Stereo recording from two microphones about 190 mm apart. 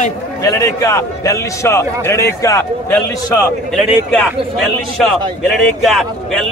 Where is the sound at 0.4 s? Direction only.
15° left (ahead or behind).